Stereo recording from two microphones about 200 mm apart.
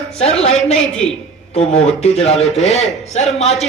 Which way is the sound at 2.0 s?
30° left (ahead or behind).